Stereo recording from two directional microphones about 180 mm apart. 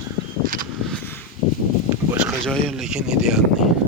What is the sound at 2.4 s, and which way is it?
Speech, 5° left (ahead or behind).